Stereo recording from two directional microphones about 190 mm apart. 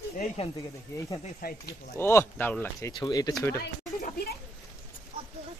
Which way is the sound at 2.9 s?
20° left (ahead or behind).